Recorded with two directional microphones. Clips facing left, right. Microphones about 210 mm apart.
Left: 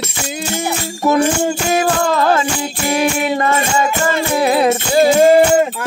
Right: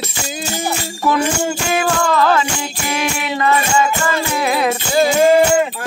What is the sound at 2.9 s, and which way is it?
Music, 45° left (ahead or behind).